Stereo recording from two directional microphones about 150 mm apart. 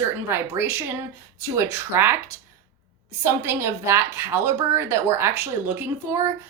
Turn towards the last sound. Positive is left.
turn(degrees=-15)  # may be behind; listen again after turning